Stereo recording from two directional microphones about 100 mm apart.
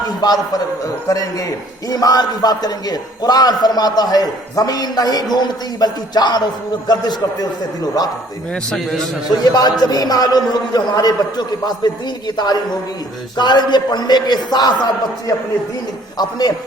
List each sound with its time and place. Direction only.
0.2 s a man's voice: 40° left (ahead or behind)
9.4 s a man's voice: 40° left (ahead or behind)